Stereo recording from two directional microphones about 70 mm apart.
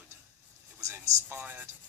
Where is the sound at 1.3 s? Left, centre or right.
Right.